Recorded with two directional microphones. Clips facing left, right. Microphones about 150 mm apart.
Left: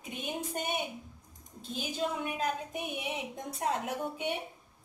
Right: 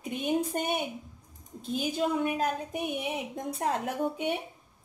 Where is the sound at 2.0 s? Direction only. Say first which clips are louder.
Right 4 dB; 50° right (ahead or behind).